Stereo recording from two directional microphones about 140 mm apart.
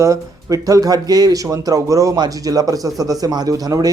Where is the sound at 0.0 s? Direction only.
25° right (ahead or behind).